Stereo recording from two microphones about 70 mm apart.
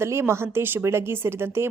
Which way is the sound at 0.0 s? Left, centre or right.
Right.